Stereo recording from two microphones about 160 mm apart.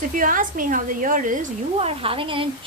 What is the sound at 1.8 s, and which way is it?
Speech, 35° right (ahead or behind).